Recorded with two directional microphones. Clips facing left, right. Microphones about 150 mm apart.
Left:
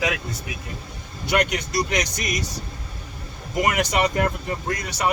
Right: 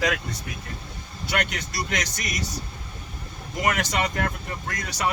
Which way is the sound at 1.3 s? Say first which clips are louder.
Left 6 dB; 20° left (ahead or behind).